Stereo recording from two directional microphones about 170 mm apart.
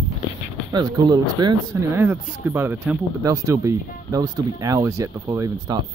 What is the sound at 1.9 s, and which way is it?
Speech, 10° right (ahead or behind).